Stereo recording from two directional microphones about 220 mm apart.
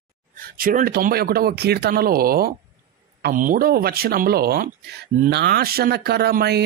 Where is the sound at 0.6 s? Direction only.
40° right (ahead or behind).